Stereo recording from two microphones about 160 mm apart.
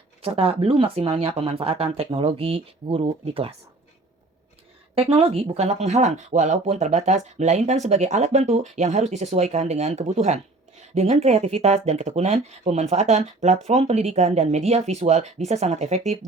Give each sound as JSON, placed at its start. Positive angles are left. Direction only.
{"t": 0.2, "sound": "speech", "side_deg": -35}
{"t": 4.9, "sound": "speech", "side_deg": -35}